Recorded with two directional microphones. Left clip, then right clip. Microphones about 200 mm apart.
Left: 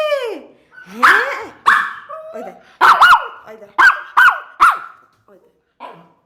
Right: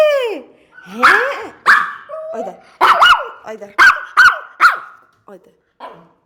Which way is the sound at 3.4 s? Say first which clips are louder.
Right 7 dB; 45° right (ahead or behind).